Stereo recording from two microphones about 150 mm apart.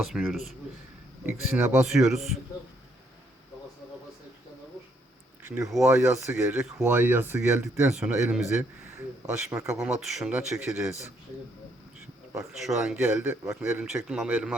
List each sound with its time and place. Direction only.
0.0 s speech: 5° right (ahead or behind)
1.3 s a man's voice: 15° right (ahead or behind)
1.9 s speech: 5° right (ahead or behind)
5.6 s speech: centre (ahead or behind)
6.0 s a man's voice: 15° right (ahead or behind)
7.9 s speech: 5° right (ahead or behind)
9.5 s speech: 20° right (ahead or behind)
9.8 s speech: centre (ahead or behind)
12.4 s speech: centre (ahead or behind)
13.0 s a man's voice: 10° right (ahead or behind)